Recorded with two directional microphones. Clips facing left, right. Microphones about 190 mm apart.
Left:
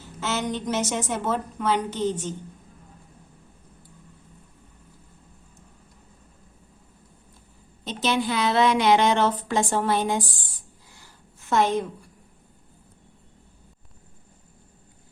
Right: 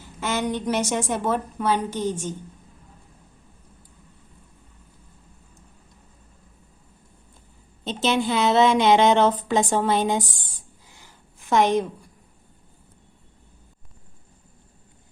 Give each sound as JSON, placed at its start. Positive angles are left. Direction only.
{"t": 0.0, "sound": "a woman's voice", "side_deg": -15}
{"t": 7.9, "sound": "a woman's voice", "side_deg": -25}
{"t": 10.9, "sound": "a sound", "side_deg": -15}